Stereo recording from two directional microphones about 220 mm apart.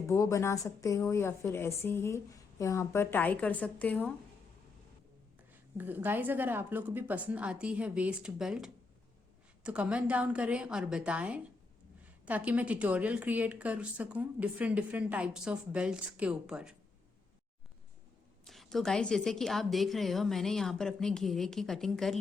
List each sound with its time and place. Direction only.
0.1 s a woman's voice: 15° left (ahead or behind)
5.7 s a woman's voice: 10° right (ahead or behind)
18.4 s speech: centre (ahead or behind)